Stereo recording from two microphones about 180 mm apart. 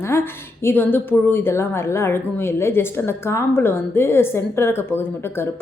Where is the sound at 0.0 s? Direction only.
15° left (ahead or behind).